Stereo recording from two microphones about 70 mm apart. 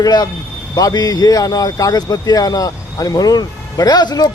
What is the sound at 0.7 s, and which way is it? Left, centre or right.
Speech, left.